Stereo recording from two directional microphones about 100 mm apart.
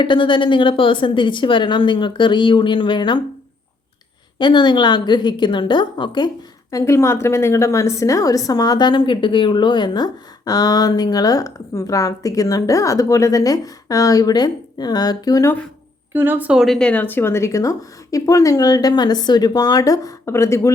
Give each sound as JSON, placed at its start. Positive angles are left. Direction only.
{"t": 0.0, "sound": "a woman's voice", "side_deg": 55}
{"t": 4.4, "sound": "a woman's voice", "side_deg": 50}
{"t": 6.7, "sound": "a woman's voice", "side_deg": 30}
{"t": 16.1, "sound": "a woman's voice", "side_deg": -20}
{"t": 16.5, "sound": "speech", "side_deg": -5}
{"t": 16.7, "sound": "a woman's voice", "side_deg": 10}